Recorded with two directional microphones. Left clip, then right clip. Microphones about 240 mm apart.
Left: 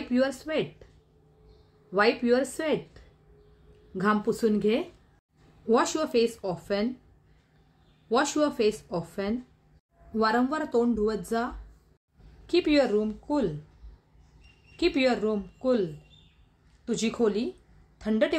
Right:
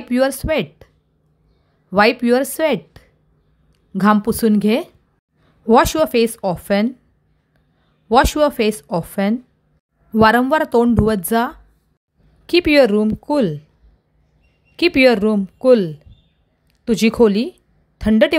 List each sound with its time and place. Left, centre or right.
0.1 s speech: right
1.9 s speech: right
8.1 s speech: right
14.8 s a woman's voice: right